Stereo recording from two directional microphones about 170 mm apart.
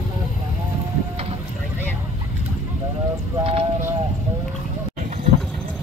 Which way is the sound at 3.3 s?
35° right (ahead or behind).